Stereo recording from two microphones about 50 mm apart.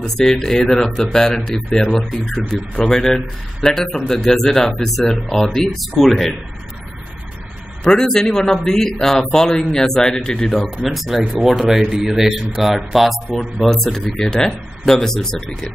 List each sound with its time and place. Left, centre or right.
0.0 s speech: centre
1.2 s speech: centre
7.8 s speech: centre